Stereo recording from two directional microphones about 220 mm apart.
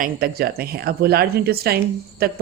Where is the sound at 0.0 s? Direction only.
45° right (ahead or behind).